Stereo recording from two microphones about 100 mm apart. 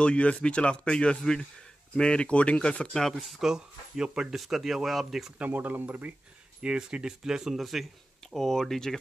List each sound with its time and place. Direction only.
0.0 s speech: 10° left (ahead or behind)
5.4 s speech: 15° right (ahead or behind); by 8.9 s 5° left (ahead or behind)